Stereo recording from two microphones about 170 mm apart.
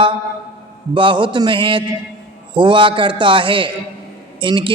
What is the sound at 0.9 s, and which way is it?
A man's voice, 30° right (ahead or behind).